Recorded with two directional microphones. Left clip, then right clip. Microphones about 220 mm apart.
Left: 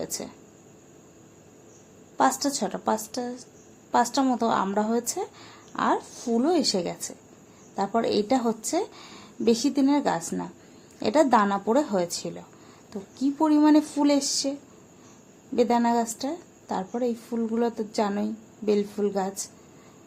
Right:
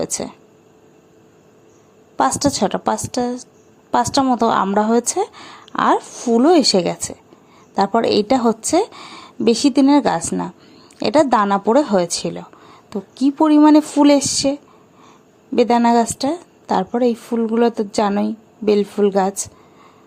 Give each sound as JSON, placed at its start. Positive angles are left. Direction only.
{"t": 0.0, "sound": "a woman's voice", "side_deg": -30}
{"t": 2.1, "sound": "a woman's voice", "side_deg": -30}